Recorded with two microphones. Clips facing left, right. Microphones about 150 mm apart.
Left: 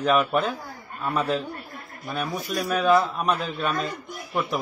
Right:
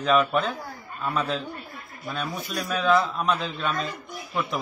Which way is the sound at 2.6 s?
5° left (ahead or behind).